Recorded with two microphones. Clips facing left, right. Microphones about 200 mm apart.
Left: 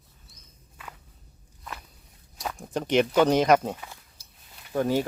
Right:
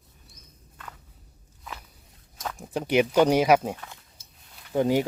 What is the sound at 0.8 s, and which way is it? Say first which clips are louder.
Walk: even; 10° left (ahead or behind).